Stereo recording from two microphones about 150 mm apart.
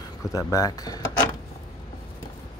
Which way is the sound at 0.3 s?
20° left (ahead or behind).